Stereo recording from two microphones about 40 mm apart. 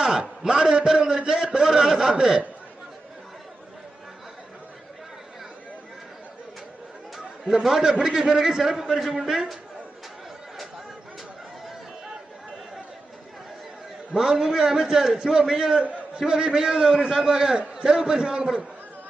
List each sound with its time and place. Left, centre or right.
0.0 s a man's voice: centre
7.4 s a man's voice: centre
14.1 s a man's voice: centre